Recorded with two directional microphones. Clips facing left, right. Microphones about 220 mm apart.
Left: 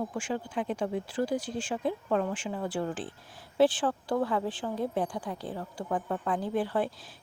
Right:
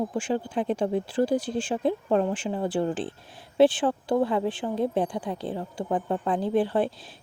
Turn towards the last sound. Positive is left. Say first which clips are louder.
# right 5 dB
turn(degrees=-25)  # may be behind; listen again after turning